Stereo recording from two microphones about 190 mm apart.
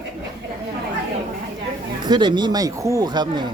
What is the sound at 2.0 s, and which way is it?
Speech, 25° right (ahead or behind).